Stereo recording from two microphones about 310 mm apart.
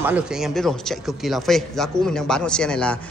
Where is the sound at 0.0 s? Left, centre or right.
Centre.